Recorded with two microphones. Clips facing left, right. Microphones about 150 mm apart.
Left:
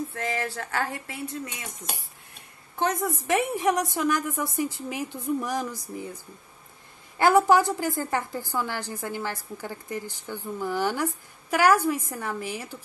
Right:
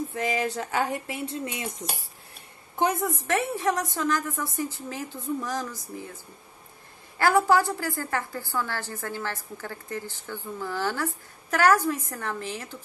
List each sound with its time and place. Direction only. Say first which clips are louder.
0.1 s speech: right 3 dB; 15° right (ahead or behind)
2.7 s a woman's voice: right 1 dB; 15° right (ahead or behind)
3.2 s a woman's voice: left 2 dB; 15° left (ahead or behind)
7.2 s a woman's voice: left 2 dB; 20° left (ahead or behind)